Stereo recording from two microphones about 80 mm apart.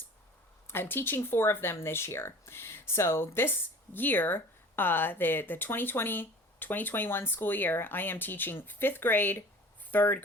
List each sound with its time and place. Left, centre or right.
0.7 s speech: left